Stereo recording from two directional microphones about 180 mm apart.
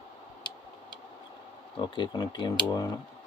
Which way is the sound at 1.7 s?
25° left (ahead or behind).